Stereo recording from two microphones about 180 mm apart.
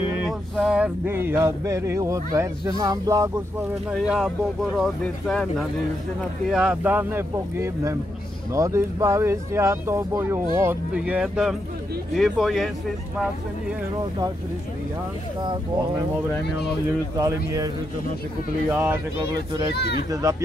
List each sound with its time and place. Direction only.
0.3 s speech: centre (ahead or behind); by 3.3 s 20° right (ahead or behind)
3.9 s speech: centre (ahead or behind)
16.4 s speech: 65° left (ahead or behind)
17.2 s speech: 20° right (ahead or behind)
18.7 s speech: 10° right (ahead or behind)
19.7 s speech: 65° left (ahead or behind)
20.1 s speech: 20° right (ahead or behind)